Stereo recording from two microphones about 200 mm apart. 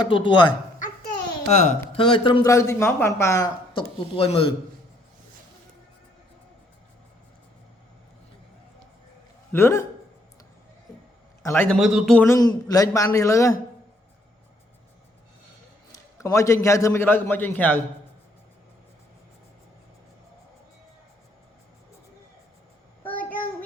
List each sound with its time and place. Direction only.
0.0 s speech: 25° left (ahead or behind)
1.5 s speech: 35° left (ahead or behind)
9.5 s a man's voice: 10° left (ahead or behind)
11.4 s a man's voice: 10° left (ahead or behind)
11.8 s speech: centre (ahead or behind)
12.3 s a man's voice: 20° left (ahead or behind)
15.9 s a man's voice: 15° left (ahead or behind)
23.1 s child singing: 10° left (ahead or behind)